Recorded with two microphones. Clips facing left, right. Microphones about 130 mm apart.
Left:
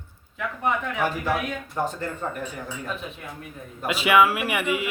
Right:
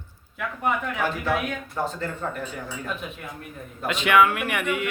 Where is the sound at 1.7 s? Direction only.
15° left (ahead or behind).